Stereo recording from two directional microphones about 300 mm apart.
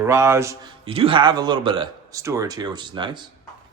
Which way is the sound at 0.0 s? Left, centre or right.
Centre.